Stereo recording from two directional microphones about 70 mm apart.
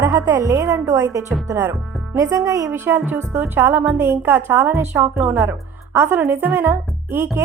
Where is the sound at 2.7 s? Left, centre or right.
Right.